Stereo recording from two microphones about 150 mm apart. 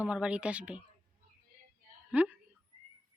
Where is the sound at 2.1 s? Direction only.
10° right (ahead or behind).